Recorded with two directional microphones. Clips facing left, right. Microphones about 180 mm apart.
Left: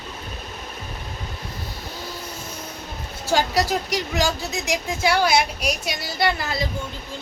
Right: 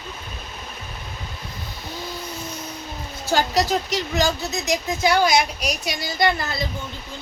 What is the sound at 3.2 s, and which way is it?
Speech, 10° left (ahead or behind).